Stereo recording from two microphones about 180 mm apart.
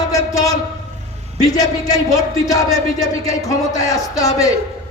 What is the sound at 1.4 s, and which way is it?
A man's voice, 20° left (ahead or behind).